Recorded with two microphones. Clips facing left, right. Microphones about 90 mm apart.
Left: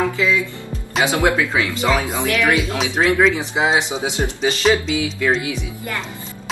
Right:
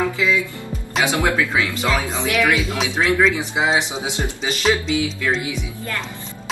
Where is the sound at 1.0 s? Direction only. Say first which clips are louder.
Left 2 dB; 20° left (ahead or behind).